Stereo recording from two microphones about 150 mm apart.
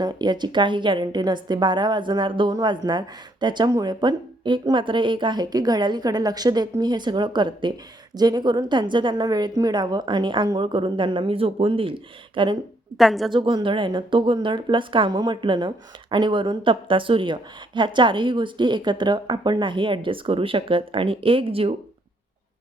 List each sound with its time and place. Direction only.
0.0 s a woman's voice: 30° right (ahead or behind)
13.0 s a woman's voice: centre (ahead or behind)
13.3 s a woman's voice: 35° right (ahead or behind)